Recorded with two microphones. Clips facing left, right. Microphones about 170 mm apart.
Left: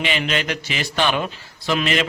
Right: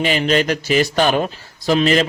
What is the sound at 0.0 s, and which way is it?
A man's voice, 40° right (ahead or behind).